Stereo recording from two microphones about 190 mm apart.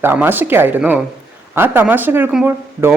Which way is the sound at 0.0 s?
10° right (ahead or behind).